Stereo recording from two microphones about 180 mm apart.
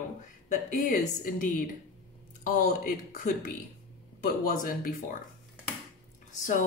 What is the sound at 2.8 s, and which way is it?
Speech, 50° left (ahead or behind).